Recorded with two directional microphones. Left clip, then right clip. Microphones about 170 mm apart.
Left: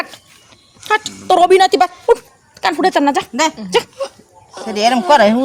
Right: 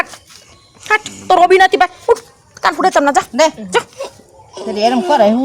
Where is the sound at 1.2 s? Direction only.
15° left (ahead or behind).